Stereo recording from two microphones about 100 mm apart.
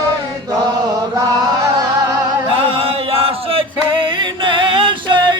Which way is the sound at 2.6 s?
70° right (ahead or behind).